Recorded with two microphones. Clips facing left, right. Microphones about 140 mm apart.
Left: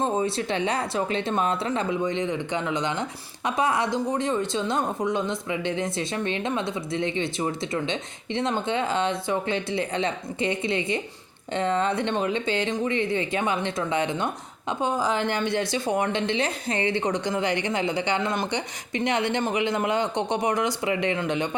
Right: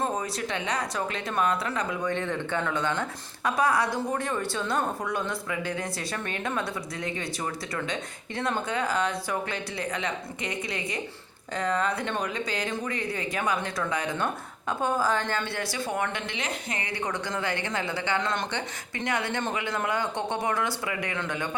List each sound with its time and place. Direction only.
0.0 s speech: 25° left (ahead or behind)